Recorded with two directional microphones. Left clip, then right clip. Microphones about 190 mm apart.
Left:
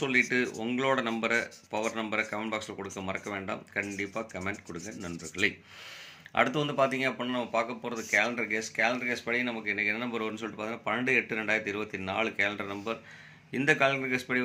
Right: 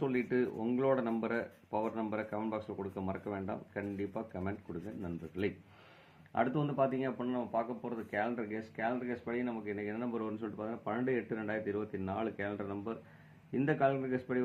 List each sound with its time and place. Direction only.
0.0 s speech: 10° left (ahead or behind)
6.3 s speech: 15° left (ahead or behind)